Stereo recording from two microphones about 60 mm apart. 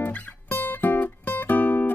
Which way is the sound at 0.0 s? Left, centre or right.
Left.